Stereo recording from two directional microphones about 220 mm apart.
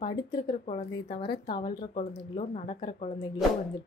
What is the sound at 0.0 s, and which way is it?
Speech, 20° left (ahead or behind).